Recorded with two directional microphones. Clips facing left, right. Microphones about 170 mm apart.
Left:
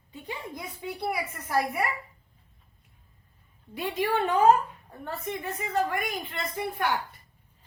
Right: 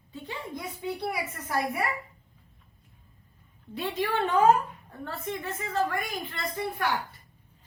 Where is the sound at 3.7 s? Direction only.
10° left (ahead or behind).